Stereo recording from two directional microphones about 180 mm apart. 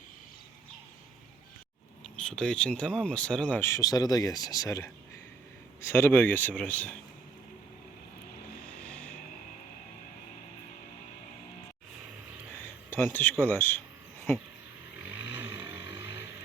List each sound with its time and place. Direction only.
2.0 s speech: 5° left (ahead or behind)
8.8 s vehicle: 5° left (ahead or behind)
12.9 s speech: 10° left (ahead or behind)